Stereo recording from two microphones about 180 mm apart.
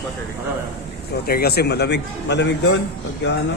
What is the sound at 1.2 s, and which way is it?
A man's voice, 60° left (ahead or behind).